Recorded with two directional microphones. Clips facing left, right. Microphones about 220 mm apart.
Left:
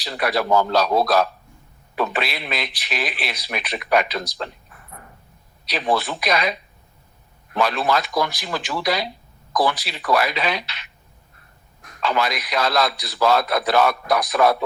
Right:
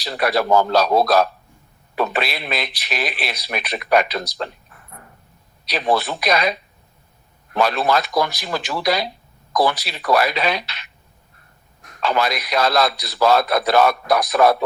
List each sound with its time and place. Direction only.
0.0 s speech: 40° right (ahead or behind)
5.6 s speech: 40° right (ahead or behind)
7.5 s speech: 40° right (ahead or behind)
12.0 s speech: 40° right (ahead or behind)